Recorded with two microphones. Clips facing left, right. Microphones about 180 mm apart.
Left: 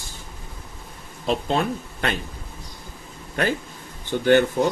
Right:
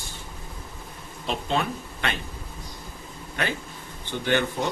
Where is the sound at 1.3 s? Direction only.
40° left (ahead or behind).